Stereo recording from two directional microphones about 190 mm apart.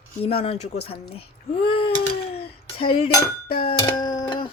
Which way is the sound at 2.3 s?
30° left (ahead or behind).